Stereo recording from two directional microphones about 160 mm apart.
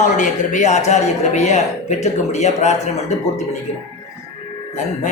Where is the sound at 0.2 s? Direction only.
45° left (ahead or behind).